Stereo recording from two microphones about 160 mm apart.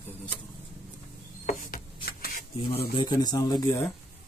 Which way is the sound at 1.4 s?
55° left (ahead or behind).